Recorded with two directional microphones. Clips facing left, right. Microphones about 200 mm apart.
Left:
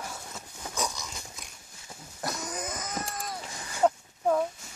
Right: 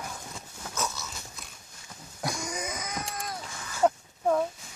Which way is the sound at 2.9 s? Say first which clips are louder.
Even; 5° left (ahead or behind).